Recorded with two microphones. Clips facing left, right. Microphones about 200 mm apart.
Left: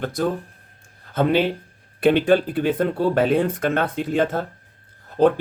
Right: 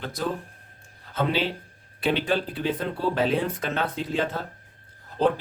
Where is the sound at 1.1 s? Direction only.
55° left (ahead or behind).